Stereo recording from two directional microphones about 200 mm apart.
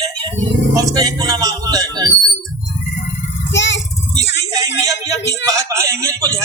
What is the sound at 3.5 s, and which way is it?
Child singing, 65° left (ahead or behind).